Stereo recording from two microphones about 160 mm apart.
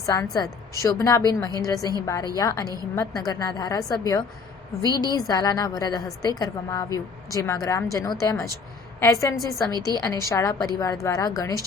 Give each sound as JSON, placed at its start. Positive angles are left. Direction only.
{"t": 0.0, "sound": "a woman's voice", "side_deg": 20}